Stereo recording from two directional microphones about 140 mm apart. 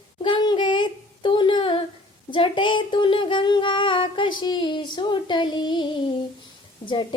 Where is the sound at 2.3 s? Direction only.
35° left (ahead or behind).